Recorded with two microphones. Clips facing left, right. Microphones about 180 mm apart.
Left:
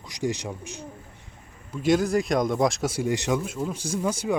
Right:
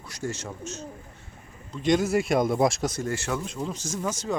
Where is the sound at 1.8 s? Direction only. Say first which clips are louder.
Left 1 dB; 5° left (ahead or behind).